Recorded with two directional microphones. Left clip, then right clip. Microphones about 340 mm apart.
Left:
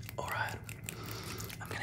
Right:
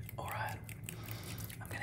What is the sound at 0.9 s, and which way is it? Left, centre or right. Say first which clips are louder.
Biting: left 5 dB; left.